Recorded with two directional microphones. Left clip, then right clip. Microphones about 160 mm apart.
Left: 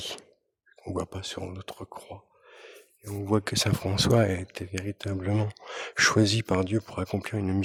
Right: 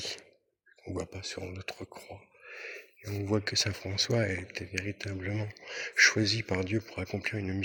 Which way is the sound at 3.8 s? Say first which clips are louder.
Left 4 dB; 85° left.